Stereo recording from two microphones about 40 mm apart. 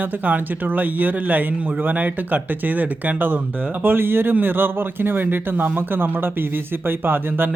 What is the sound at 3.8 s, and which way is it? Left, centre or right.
Speech, right.